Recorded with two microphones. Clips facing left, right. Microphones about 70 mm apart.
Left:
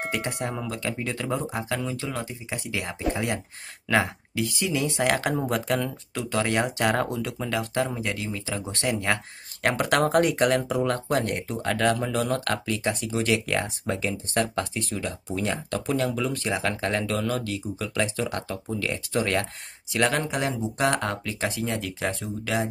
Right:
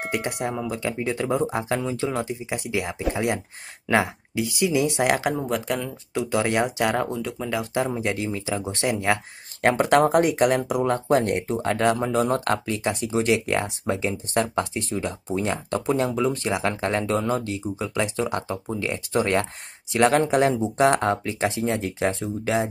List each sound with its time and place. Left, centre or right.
0.0 s speech: centre
2.8 s speech: centre
5.5 s speech: centre
6.1 s speech: centre
6.6 s speech: centre
7.4 s speech: centre
8.0 s speech: right
8.6 s speech: centre
9.6 s speech: right
11.1 s speech: right